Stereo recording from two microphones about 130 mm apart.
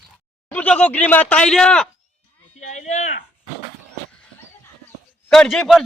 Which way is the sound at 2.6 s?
65° left (ahead or behind).